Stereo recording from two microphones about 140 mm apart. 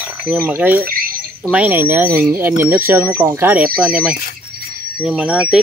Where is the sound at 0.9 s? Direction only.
90° right.